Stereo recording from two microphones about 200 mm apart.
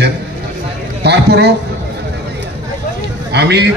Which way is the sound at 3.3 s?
55° right (ahead or behind).